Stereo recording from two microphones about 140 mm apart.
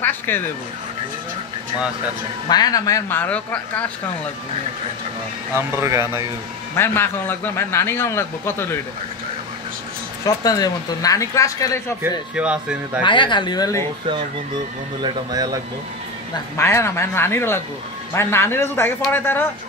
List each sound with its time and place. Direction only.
0.0 s speech: 15° left (ahead or behind)
2.4 s speech: 30° left (ahead or behind)
3.1 s a man's voice: 10° left (ahead or behind)
5.5 s speech: 15° right (ahead or behind)
6.8 s a man's voice: 15° left (ahead or behind)
10.2 s speech: 25° left (ahead or behind)
12.0 s speech: 10° right (ahead or behind)
13.0 s speech: 35° left (ahead or behind)
15.0 s speech: 30° right (ahead or behind)
16.5 s a man's voice: 20° left (ahead or behind)